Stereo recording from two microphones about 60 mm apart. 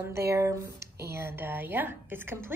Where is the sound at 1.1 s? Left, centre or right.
Right.